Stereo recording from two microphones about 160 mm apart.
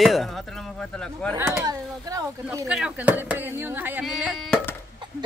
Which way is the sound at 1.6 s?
20° right (ahead or behind).